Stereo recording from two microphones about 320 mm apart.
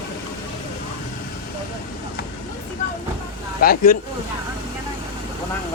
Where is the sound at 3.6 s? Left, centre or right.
Left.